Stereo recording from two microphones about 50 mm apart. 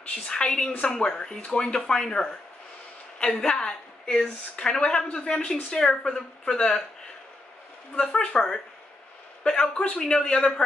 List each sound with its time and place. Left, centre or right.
0.3 s a woman's voice: centre
7.9 s a woman's voice: centre